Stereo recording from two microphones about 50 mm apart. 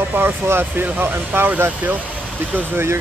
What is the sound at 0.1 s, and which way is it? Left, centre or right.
Speech, right.